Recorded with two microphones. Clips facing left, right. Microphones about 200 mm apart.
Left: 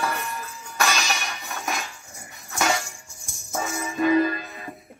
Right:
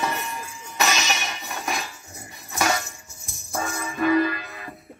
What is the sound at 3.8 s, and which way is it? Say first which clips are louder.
Music: left 1 dB; 15° left (ahead or behind).